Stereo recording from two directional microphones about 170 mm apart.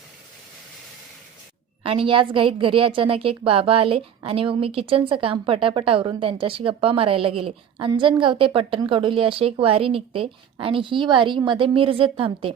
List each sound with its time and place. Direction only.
1.8 s a woman's voice: 30° right (ahead or behind)